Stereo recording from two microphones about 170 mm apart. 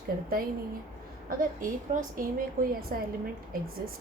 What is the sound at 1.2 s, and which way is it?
A woman's voice, 55° right (ahead or behind).